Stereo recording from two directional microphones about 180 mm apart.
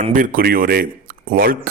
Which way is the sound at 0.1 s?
50° right (ahead or behind).